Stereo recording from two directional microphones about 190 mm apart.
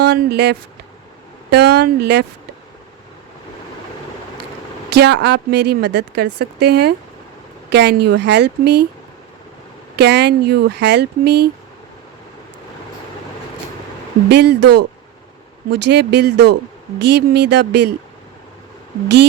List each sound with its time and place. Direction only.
0.0 s a woman's voice: 60° right (ahead or behind)
4.9 s a woman's voice: 60° right (ahead or behind)
9.9 s a woman's voice: 60° right (ahead or behind)
14.3 s a woman's voice: 60° right (ahead or behind)